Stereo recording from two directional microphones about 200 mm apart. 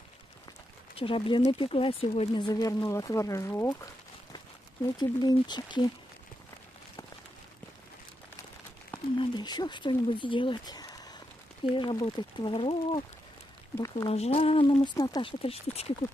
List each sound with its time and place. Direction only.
0.9 s speech: 25° left (ahead or behind)
9.2 s speech: 20° left (ahead or behind)
14.0 s speech: 30° left (ahead or behind)